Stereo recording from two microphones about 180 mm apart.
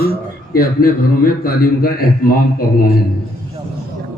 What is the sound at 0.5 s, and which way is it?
A man's voice, 55° left (ahead or behind).